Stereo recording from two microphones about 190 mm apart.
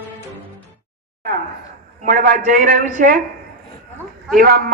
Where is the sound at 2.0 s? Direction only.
45° right (ahead or behind).